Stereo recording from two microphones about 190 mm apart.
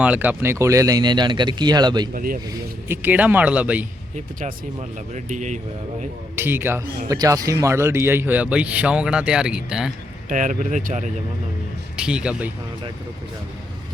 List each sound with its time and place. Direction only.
0.0 s speech: 10° right (ahead or behind)
2.1 s speech: 50° right (ahead or behind)
2.9 s speech: 10° right (ahead or behind)
4.1 s speech: 45° right (ahead or behind)
6.3 s speech: 10° right (ahead or behind)
10.2 s speech: 45° right (ahead or behind)
11.9 s speech: 5° right (ahead or behind)